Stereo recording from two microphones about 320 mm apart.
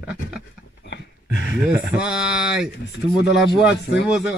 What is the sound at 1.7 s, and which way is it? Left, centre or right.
Speech, centre.